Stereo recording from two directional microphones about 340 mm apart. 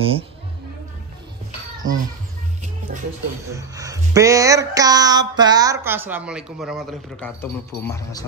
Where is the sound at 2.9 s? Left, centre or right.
Right.